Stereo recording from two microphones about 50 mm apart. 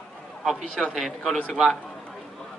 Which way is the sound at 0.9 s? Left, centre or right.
Centre.